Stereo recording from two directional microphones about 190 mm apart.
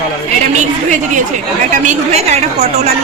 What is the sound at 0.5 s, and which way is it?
A woman's voice, 40° right (ahead or behind).